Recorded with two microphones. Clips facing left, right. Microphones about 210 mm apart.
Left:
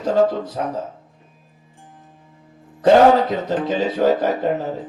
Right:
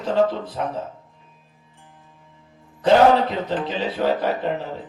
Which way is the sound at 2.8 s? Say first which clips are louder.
Left 3 dB; 45° left (ahead or behind).